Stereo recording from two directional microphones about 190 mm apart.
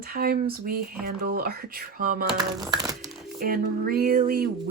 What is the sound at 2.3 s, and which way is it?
Speech, 20° right (ahead or behind).